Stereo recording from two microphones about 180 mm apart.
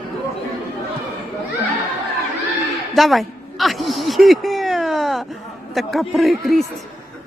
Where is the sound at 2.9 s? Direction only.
Centre (ahead or behind).